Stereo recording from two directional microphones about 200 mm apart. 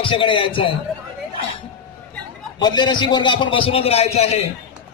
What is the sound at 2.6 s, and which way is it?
A man's voice, 20° left (ahead or behind).